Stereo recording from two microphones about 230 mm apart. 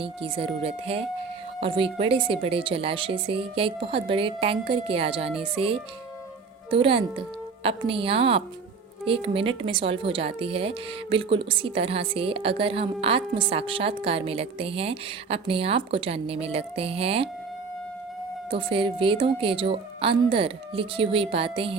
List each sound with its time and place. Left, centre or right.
0.0 s speech: right
18.5 s speech: right